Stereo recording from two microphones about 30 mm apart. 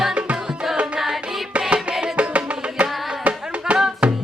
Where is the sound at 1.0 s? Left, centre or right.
Centre.